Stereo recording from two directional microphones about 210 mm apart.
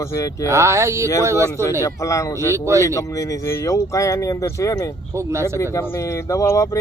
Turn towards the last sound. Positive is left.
turn(degrees=15)  # may be behind; listen again after turning